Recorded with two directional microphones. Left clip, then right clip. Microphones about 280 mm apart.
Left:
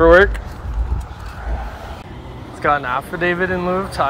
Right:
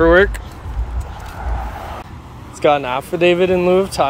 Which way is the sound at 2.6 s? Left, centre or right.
Right.